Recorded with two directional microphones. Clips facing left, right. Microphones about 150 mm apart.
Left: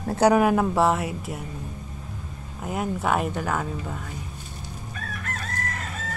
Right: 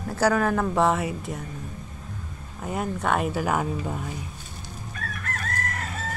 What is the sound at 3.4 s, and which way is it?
Speech, 15° right (ahead or behind).